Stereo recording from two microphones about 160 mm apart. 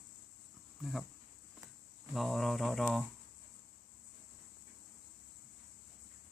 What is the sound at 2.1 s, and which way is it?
Speech, centre (ahead or behind).